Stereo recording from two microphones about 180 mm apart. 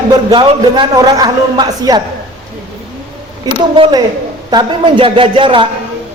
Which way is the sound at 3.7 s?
30° right (ahead or behind).